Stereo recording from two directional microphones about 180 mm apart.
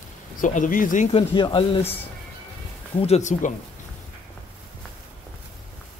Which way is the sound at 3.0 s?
40° left (ahead or behind).